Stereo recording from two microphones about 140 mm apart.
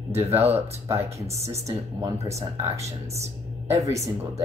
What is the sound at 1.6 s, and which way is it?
Speech, 25° right (ahead or behind).